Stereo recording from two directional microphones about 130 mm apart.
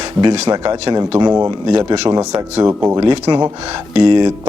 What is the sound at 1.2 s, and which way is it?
Speech, 20° right (ahead or behind).